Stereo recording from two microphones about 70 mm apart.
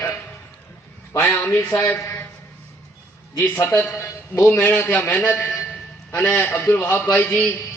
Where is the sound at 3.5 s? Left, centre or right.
Left.